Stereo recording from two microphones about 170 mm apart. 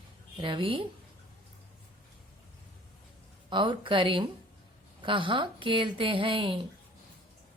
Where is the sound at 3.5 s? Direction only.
30° right (ahead or behind).